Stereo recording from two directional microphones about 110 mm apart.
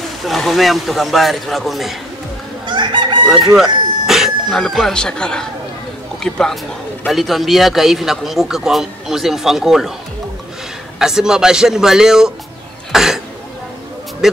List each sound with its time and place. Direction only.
0.2 s a man's voice: centre (ahead or behind)
2.6 s chicken: 45° right (ahead or behind)
3.5 s a man's voice: 5° right (ahead or behind)
11.0 s a man's voice: 5° right (ahead or behind)
14.2 s a man's voice: 5° right (ahead or behind)